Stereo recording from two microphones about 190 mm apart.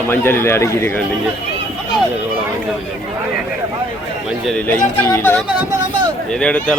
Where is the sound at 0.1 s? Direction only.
10° left (ahead or behind).